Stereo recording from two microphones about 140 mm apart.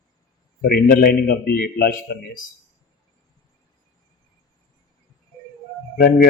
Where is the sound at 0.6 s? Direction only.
90° left.